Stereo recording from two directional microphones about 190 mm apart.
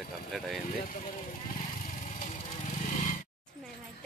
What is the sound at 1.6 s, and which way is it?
Vehicle, 40° left (ahead or behind).